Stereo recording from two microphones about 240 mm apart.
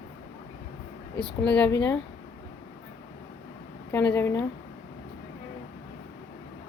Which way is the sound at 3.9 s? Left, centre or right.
Centre.